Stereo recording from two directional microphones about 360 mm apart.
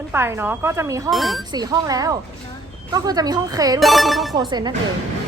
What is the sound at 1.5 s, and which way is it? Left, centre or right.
Speech, centre.